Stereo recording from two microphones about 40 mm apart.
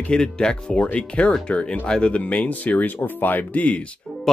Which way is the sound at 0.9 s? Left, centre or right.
Left.